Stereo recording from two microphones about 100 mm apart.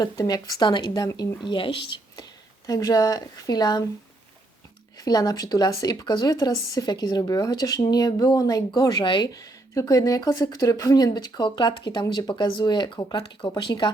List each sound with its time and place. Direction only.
0.0 s speech: 40° left (ahead or behind)
0.6 s speech: 50° left (ahead or behind)
1.5 s speech: 60° left (ahead or behind)
4.9 s speech: 40° left (ahead or behind)